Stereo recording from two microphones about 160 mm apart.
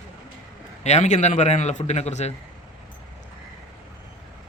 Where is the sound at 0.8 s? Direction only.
45° left (ahead or behind).